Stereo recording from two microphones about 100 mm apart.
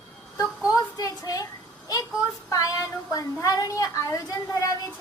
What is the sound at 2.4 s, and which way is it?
A woman's voice, 35° left (ahead or behind).